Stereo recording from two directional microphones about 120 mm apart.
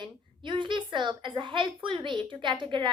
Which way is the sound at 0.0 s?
40° right (ahead or behind).